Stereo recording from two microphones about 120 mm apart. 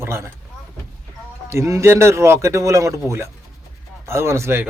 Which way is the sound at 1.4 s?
25° right (ahead or behind).